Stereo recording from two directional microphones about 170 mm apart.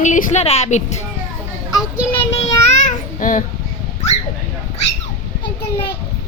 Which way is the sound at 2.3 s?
40° left (ahead or behind).